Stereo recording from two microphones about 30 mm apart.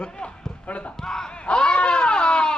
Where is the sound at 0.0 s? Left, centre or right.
Left.